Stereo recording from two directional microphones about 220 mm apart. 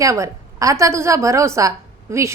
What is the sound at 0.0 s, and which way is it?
A woman's voice, 15° right (ahead or behind).